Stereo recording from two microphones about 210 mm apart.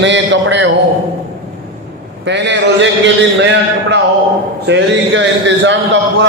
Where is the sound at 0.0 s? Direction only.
60° right (ahead or behind).